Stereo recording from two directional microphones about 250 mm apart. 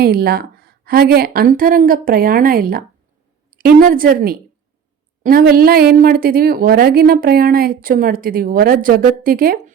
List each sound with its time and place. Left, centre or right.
0.0 s a woman's voice: right